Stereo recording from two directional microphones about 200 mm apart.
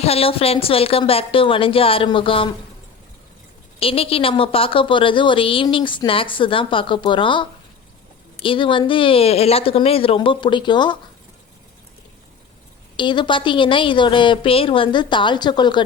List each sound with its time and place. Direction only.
0.0 s a woman's voice: 30° left (ahead or behind)
3.8 s a woman's voice: 30° left (ahead or behind)
13.0 s a woman's voice: 25° left (ahead or behind)